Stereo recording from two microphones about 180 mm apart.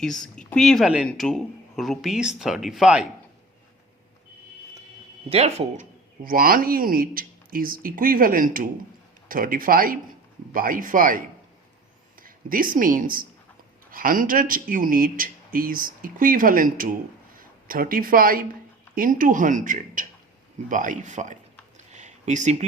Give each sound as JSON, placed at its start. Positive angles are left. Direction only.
{"t": 0.0, "sound": "speech", "side_deg": 0}
{"t": 5.3, "sound": "speech", "side_deg": -35}
{"t": 21.9, "sound": "a sound", "side_deg": -40}